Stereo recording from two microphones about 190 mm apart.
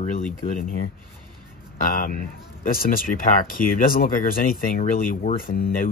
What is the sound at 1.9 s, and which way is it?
Speech, 45° left (ahead or behind).